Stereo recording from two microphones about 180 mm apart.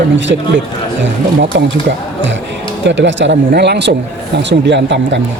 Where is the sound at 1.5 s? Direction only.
75° right (ahead or behind).